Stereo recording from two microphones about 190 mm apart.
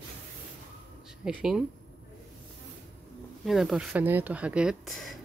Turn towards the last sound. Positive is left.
turn(degrees=0)  # may be behind; listen again after turning